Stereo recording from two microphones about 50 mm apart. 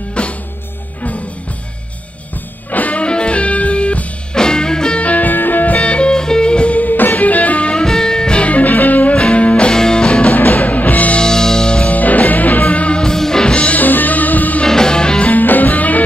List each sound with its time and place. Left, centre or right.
0.2 s music: left
2.7 s music: left
5.0 s music: left
5.8 s music: left
7.8 s music: centre; by 9.1 s left
9.1 s music: left
9.7 s music: centre
10.3 s music: left
11.1 s music: centre
13.7 s music: left
14.6 s music: centre
15.3 s music: left